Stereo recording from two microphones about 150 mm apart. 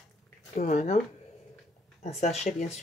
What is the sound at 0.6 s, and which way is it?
Speech, 55° left (ahead or behind).